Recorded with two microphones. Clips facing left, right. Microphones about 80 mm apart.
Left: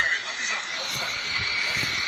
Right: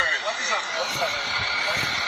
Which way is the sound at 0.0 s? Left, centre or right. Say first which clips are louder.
Right 3 dB; right.